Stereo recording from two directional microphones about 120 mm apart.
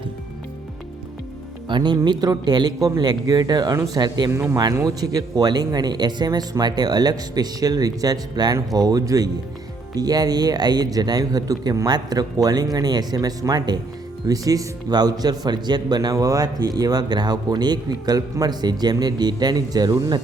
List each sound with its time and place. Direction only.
1.7 s speech: 35° right (ahead or behind)
4.3 s speech: 25° right (ahead or behind)